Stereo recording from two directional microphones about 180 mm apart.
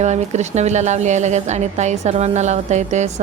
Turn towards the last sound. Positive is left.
turn(degrees=-40)  # may be behind; listen again after turning